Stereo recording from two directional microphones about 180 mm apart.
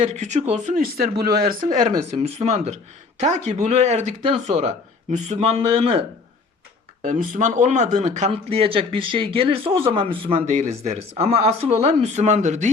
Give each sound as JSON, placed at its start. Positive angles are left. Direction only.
{"t": 0.0, "sound": "speech", "side_deg": -40}
{"t": 2.0, "sound": "speech", "side_deg": -35}
{"t": 7.0, "sound": "speech", "side_deg": -45}